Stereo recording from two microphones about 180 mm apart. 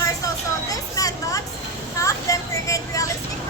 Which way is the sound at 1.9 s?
15° left (ahead or behind).